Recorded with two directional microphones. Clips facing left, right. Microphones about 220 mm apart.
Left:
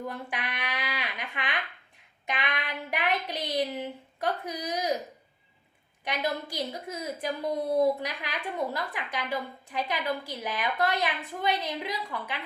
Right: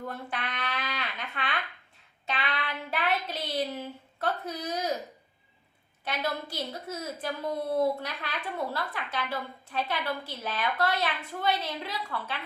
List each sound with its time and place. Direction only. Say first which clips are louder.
0.1 s speech: even; 15° left (ahead or behind)
6.1 s a woman's voice: left 2 dB; 15° left (ahead or behind)